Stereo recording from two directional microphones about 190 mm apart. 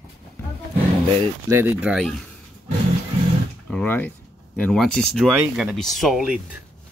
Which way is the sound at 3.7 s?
5° left (ahead or behind).